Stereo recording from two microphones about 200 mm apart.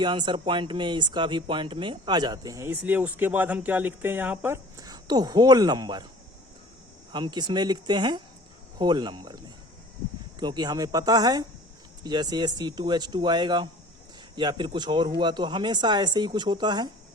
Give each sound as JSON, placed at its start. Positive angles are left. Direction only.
{"t": 0.0, "sound": "speech", "side_deg": -25}
{"t": 7.1, "sound": "speech", "side_deg": -20}
{"t": 10.4, "sound": "speech", "side_deg": -20}